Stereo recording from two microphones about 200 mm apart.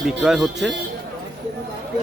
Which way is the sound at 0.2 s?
5° right (ahead or behind).